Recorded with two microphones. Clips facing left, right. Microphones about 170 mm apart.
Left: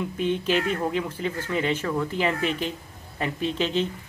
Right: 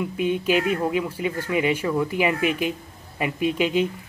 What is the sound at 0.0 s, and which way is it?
Speech, 10° right (ahead or behind).